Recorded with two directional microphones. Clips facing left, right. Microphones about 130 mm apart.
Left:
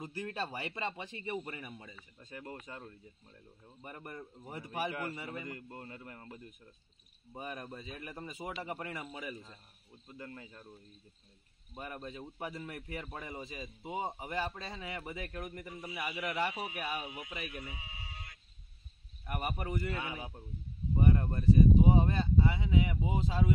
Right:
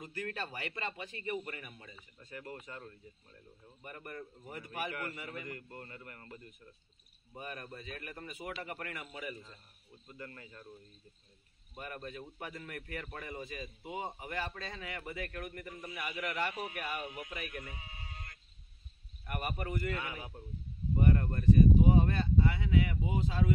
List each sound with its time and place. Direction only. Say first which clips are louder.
0.0 s speech: left 2 dB; 25° left (ahead or behind)
11.7 s speech: even; 20° left (ahead or behind)
13.3 s speech: right 1 dB; 25° left (ahead or behind); by 17.4 s 10° left (ahead or behind)
17.5 s sheep: even; 5° left (ahead or behind)
19.2 s speech: left 1 dB; 20° left (ahead or behind)